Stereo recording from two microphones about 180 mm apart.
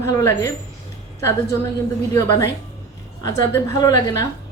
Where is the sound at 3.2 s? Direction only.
20° left (ahead or behind).